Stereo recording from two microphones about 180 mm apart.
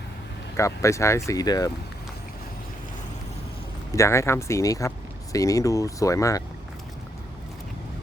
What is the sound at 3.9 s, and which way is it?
Speech, 15° left (ahead or behind).